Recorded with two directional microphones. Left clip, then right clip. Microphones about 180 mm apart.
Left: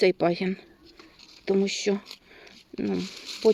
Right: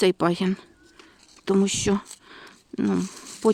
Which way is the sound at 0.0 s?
45° right (ahead or behind).